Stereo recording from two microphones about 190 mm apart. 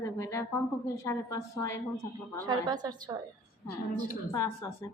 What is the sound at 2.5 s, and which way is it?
Speech, 20° right (ahead or behind).